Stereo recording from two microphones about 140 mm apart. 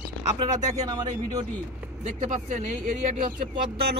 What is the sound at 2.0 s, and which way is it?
Speech, 60° right (ahead or behind).